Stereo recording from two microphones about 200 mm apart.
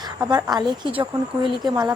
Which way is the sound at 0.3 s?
20° right (ahead or behind).